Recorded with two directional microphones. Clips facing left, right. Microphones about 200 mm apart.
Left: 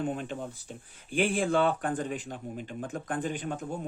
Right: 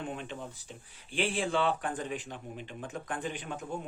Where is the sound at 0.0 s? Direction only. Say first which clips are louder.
Left 6 dB; 45° left (ahead or behind).